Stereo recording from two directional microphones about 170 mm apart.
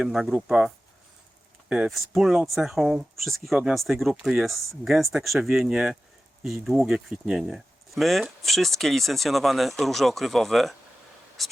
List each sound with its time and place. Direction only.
0.0 s speech: 5° right (ahead or behind)
1.7 s speech: centre (ahead or behind)
11.4 s writing: centre (ahead or behind)